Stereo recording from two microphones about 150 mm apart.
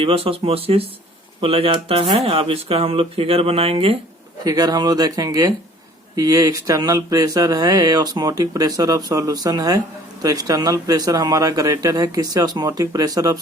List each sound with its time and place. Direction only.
0.0 s speech: 40° right (ahead or behind)
4.4 s speech: 25° right (ahead or behind)